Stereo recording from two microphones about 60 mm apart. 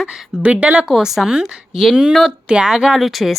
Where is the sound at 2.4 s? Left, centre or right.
Centre.